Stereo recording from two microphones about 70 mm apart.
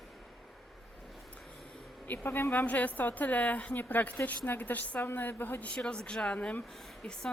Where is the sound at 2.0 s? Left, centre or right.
Left.